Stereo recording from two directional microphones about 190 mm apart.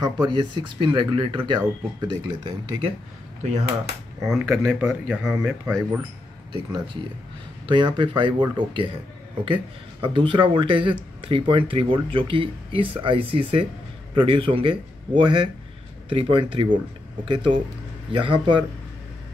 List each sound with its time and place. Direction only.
0.0 s speech: 25° right (ahead or behind)
4.2 s speech: centre (ahead or behind)
6.5 s speech: 25° right (ahead or behind)
10.0 s speech: 25° right (ahead or behind)